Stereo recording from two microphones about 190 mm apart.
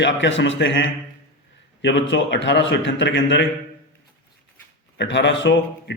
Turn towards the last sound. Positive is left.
turn(degrees=70)  # may be behind; listen again after turning